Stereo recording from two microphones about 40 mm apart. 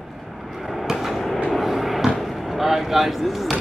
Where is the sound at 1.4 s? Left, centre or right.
Centre.